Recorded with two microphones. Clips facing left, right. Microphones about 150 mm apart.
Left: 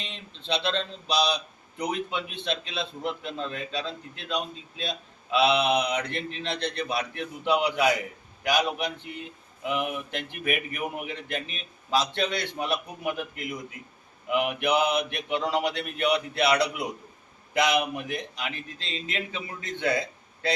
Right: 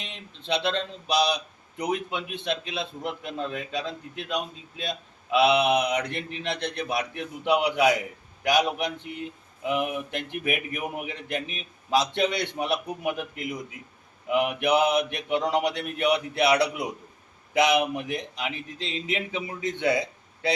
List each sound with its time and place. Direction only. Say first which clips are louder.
0.0 s a man's voice: even; 15° right (ahead or behind)
14.3 s a man's voice: right 2 dB; 15° right (ahead or behind)
17.6 s a man's voice: right 2 dB; 20° right (ahead or behind)